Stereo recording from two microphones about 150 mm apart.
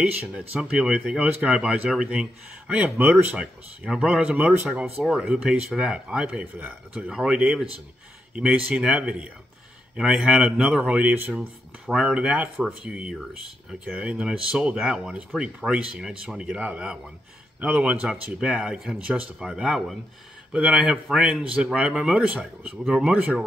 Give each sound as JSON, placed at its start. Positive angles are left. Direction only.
{"t": 0.0, "sound": "speech", "side_deg": -5}